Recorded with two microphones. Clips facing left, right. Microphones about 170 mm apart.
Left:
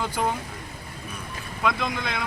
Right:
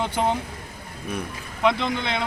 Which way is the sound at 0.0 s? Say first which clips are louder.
Right 3 dB; 25° right (ahead or behind).